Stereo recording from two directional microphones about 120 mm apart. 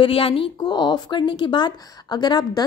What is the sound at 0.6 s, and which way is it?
A woman's voice, 35° left (ahead or behind).